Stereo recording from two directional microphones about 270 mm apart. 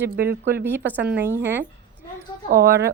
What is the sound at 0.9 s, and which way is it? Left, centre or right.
Speech, centre.